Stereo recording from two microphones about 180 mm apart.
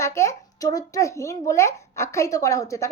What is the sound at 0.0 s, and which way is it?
A woman's voice, 15° left (ahead or behind).